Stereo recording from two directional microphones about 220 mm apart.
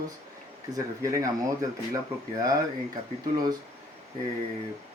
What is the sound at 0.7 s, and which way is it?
Speech, 15° right (ahead or behind).